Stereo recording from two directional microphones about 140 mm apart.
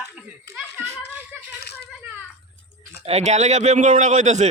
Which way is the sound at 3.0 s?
50° right (ahead or behind).